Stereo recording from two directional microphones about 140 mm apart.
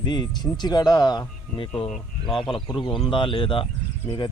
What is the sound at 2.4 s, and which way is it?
Speech, 35° left (ahead or behind).